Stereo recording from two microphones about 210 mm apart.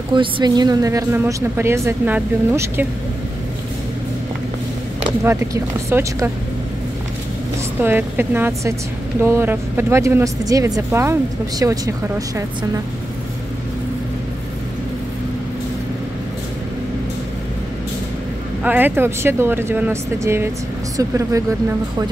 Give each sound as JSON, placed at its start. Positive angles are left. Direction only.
{"t": 0.1, "sound": "a woman's voice", "side_deg": -20}
{"t": 5.2, "sound": "a woman's voice", "side_deg": -10}
{"t": 7.8, "sound": "a woman's voice", "side_deg": -10}
{"t": 18.6, "sound": "a woman's voice", "side_deg": -10}